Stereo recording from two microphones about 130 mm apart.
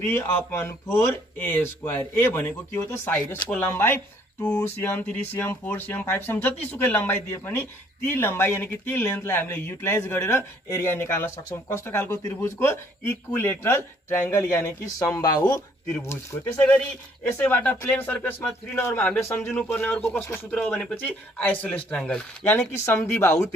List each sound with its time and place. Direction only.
0.0 s speech: 15° left (ahead or behind)
16.6 s speech: 10° left (ahead or behind)